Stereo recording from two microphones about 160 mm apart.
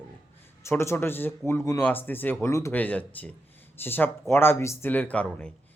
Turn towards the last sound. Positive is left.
turn(degrees=10)  # may be behind; listen again after turning